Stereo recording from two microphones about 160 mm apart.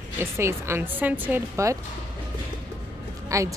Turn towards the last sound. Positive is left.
turn(degrees=-20)  # may be behind; listen again after turning